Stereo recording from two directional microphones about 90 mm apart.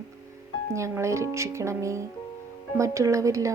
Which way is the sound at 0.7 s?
35° right (ahead or behind).